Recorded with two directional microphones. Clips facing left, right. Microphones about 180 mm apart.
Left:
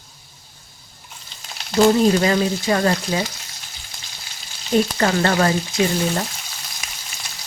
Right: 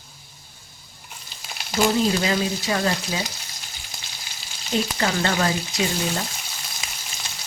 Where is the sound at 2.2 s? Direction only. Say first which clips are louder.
Left 5 dB; 50° left (ahead or behind).